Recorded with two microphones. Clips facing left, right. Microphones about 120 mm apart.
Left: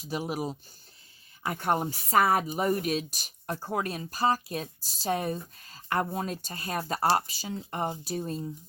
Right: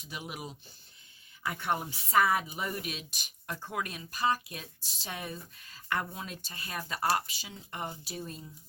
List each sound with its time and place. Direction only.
0.0 s speech: 35° left (ahead or behind)